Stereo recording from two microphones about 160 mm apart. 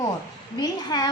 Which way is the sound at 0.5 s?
25° left (ahead or behind).